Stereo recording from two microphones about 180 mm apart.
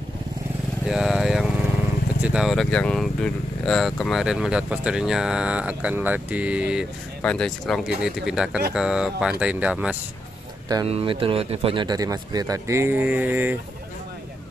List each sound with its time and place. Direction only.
0.8 s speech: centre (ahead or behind)
7.2 s speech: 5° left (ahead or behind)
10.9 s speech: 30° right (ahead or behind); by 13.6 s 10° right (ahead or behind)